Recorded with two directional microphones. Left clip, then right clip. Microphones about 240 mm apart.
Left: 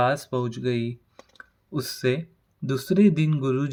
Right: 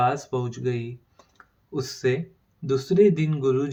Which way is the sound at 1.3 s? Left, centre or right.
Left.